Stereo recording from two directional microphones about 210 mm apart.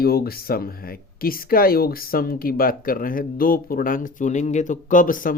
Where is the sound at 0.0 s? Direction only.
45° left (ahead or behind).